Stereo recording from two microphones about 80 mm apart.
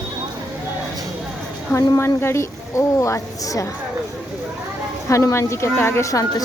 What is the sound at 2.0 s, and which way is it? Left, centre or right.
A woman's voice, left.